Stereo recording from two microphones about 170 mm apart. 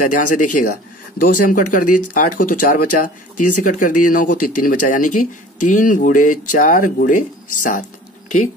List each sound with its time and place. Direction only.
0.0 s speech: 50° left (ahead or behind)